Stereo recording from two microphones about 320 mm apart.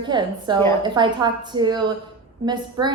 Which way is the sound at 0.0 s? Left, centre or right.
Centre.